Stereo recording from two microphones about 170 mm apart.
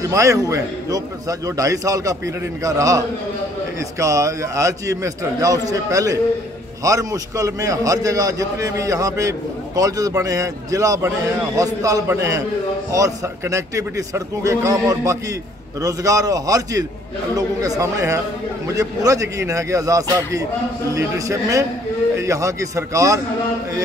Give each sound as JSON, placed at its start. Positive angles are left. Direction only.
{"t": 0.0, "sound": "a man's voice", "side_deg": -20}
{"t": 4.0, "sound": "a man's voice", "side_deg": -20}